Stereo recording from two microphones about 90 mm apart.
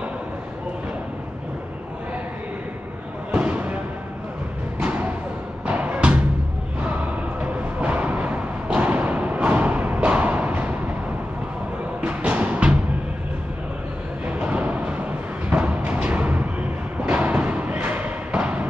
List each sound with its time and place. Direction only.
3.3 s music: 15° right (ahead or behind)
8.6 s thump: 15° right (ahead or behind)
12.0 s music: 15° right (ahead or behind)
14.2 s a sound: 15° right (ahead or behind)
15.5 s music: 15° right (ahead or behind)
17.0 s thump: 15° right (ahead or behind)